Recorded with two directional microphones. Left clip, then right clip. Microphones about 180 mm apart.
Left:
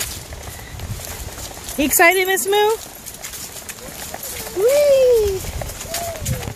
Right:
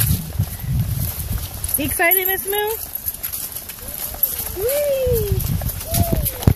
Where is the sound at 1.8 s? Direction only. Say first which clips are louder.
Left 5 dB; 30° left (ahead or behind).